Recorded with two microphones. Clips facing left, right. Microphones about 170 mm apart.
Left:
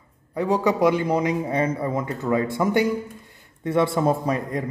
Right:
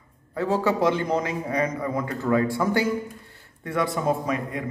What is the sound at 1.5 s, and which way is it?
A man's voice, 25° left (ahead or behind).